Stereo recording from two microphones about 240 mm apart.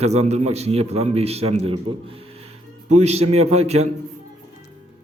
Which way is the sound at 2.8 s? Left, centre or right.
Right.